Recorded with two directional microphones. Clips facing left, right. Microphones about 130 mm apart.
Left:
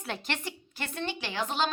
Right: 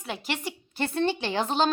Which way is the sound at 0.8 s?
30° right (ahead or behind).